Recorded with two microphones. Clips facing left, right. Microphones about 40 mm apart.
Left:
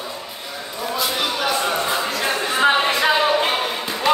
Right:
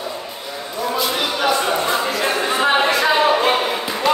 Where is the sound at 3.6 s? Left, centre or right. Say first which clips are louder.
Right 3 dB; centre.